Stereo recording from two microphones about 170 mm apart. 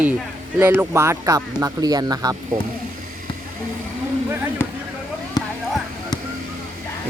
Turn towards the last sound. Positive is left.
turn(degrees=25)  # may be behind; listen again after turning